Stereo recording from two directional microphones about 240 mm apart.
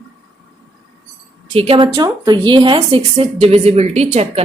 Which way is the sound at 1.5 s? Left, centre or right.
Right.